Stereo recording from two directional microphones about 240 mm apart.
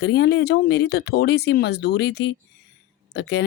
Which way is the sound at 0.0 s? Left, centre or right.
Left.